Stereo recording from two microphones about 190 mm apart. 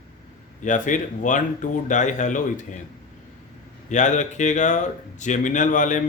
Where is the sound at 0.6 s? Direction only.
40° left (ahead or behind).